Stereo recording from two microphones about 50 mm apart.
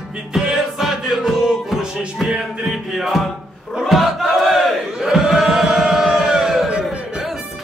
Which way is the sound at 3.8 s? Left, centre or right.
Centre.